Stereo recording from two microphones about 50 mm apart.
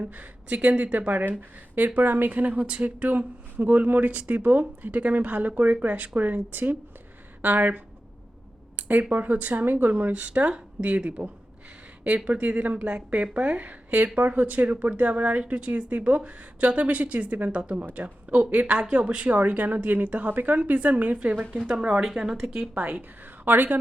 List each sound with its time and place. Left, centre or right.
0.0 s speech: right
8.7 s speech: right
10.0 s speech: right
22.7 s speech: right